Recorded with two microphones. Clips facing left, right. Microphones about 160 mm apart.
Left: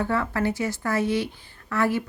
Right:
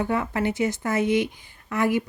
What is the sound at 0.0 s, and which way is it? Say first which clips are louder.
Speech: even; 15° right (ahead or behind).